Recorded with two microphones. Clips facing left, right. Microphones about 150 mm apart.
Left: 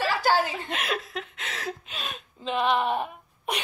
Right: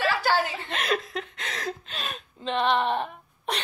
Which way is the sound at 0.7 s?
5° left (ahead or behind).